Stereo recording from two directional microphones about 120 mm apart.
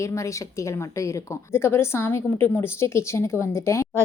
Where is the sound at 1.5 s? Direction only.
20° left (ahead or behind).